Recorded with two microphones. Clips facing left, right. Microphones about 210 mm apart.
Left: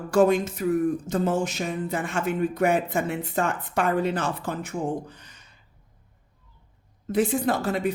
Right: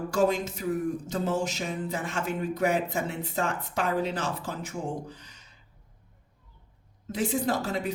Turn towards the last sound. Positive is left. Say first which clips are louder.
# left 4 dB
turn(degrees=55)  # may be behind; listen again after turning